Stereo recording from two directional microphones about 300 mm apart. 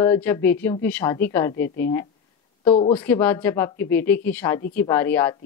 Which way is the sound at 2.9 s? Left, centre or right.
Centre.